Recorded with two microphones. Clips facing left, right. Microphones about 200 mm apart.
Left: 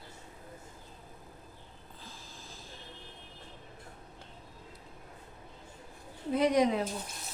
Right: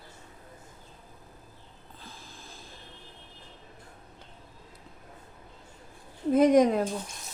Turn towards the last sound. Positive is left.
turn(degrees=-45)  # may be behind; listen again after turning